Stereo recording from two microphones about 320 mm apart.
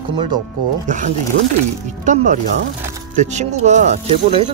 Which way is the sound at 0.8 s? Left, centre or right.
Right.